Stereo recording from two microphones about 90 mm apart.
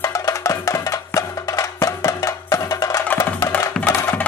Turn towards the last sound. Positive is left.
turn(degrees=25)  # may be behind; listen again after turning